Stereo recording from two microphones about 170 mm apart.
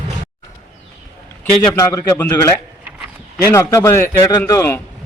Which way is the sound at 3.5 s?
15° left (ahead or behind).